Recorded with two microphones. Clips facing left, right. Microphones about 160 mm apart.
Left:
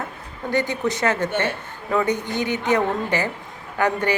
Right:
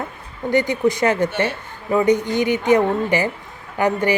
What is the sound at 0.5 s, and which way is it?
Speech, 15° right (ahead or behind).